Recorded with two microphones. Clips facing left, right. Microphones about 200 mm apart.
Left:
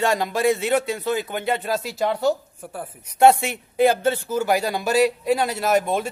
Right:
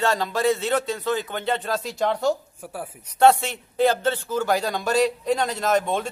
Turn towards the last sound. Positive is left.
turn(degrees=10)  # may be behind; listen again after turning